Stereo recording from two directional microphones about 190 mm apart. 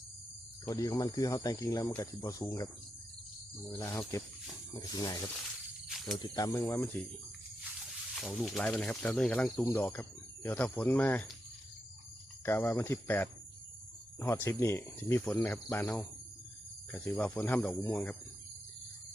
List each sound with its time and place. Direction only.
0.7 s speech: 20° left (ahead or behind)
3.7 s speech: 15° left (ahead or behind)
7.6 s speech: centre (ahead or behind)
12.5 s speech: 10° left (ahead or behind)